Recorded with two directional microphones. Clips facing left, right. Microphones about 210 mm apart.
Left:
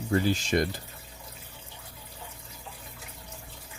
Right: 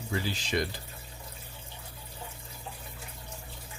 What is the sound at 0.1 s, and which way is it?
Speech, 50° left (ahead or behind).